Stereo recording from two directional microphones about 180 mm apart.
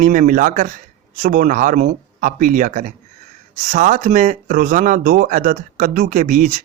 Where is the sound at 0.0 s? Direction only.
50° right (ahead or behind).